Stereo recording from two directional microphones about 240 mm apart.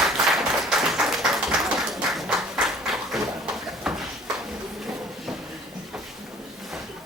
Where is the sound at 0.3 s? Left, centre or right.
Centre.